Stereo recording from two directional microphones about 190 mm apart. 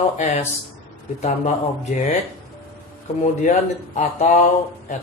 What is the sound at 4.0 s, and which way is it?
Speech, 40° left (ahead or behind).